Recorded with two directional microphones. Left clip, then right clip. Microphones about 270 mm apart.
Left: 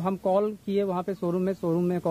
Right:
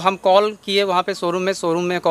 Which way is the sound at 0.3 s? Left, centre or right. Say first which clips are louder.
Right 9 dB; centre.